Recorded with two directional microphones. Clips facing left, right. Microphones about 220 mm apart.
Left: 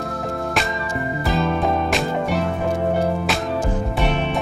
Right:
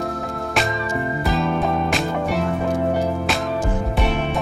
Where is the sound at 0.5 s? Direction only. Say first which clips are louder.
Right 1 dB; centre (ahead or behind).